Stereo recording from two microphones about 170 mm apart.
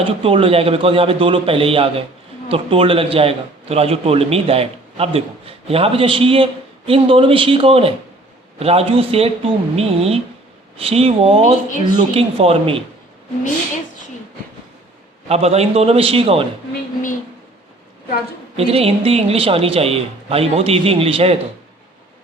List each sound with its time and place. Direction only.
0.0 s a man's voice: 35° right (ahead or behind)
15.3 s a man's voice: 40° right (ahead or behind)
18.5 s a man's voice: 35° right (ahead or behind)